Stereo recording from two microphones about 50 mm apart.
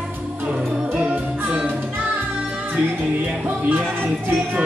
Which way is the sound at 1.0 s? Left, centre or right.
Right.